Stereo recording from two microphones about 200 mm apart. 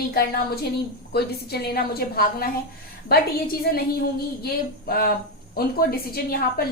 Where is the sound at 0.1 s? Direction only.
50° left (ahead or behind).